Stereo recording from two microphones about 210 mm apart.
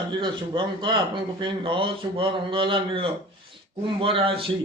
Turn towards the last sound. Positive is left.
turn(degrees=-25)  # may be behind; listen again after turning